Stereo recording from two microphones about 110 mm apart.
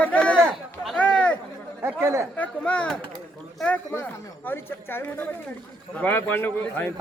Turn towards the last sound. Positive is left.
turn(degrees=20)  # may be behind; listen again after turning